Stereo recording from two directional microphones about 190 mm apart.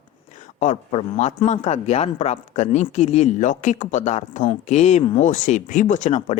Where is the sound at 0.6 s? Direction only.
35° left (ahead or behind).